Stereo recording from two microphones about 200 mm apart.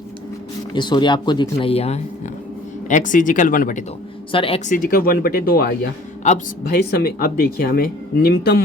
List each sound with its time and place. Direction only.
0.7 s speech: 20° left (ahead or behind); by 3.8 s 40° left (ahead or behind)
4.3 s speech: 25° left (ahead or behind); by 8.6 s 50° left (ahead or behind)